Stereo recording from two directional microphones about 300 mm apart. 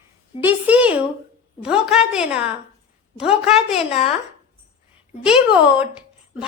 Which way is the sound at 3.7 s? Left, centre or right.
Centre.